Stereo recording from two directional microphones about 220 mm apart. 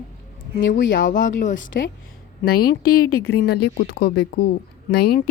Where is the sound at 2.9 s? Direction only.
80° left.